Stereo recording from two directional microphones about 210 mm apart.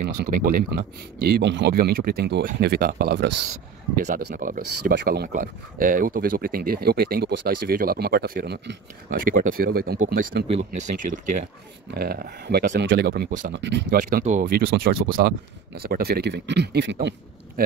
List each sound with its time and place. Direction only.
0.0 s speech: 45° right (ahead or behind)
3.9 s speech: 40° right (ahead or behind)
11.9 s speech: 45° right (ahead or behind)